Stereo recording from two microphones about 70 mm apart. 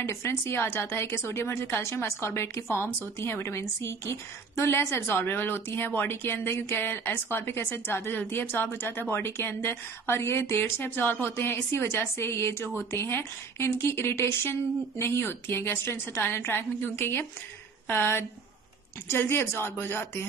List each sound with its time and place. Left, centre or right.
0.0 s a woman's voice: left